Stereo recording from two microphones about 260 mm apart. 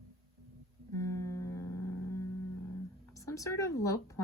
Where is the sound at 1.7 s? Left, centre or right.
Left.